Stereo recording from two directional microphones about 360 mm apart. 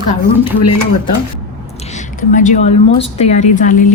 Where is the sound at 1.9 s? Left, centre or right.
Left.